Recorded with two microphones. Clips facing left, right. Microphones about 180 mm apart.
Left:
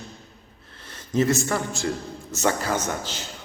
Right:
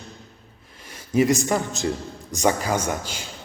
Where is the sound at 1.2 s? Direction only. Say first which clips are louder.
Right 2 dB; 15° right (ahead or behind).